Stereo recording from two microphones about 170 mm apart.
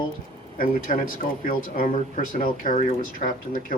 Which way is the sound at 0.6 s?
50° left (ahead or behind).